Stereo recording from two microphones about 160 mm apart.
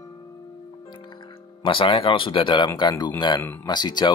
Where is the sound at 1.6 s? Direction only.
30° left (ahead or behind).